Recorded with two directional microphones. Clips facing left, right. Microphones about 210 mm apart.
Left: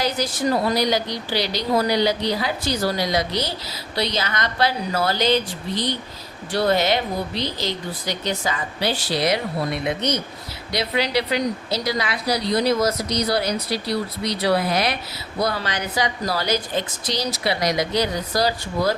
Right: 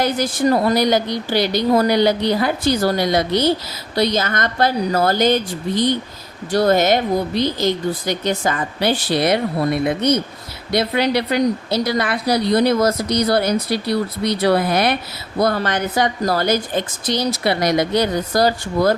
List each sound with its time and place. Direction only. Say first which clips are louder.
0.0 s a woman's voice: right 5 dB; 55° right (ahead or behind)